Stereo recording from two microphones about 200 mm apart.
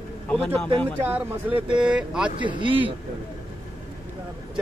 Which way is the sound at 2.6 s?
25° right (ahead or behind).